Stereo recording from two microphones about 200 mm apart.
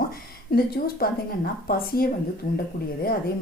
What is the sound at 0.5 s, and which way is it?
A woman's voice, 50° left (ahead or behind).